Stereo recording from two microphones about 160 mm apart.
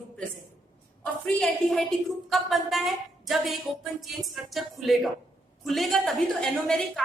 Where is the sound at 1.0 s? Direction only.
5° left (ahead or behind).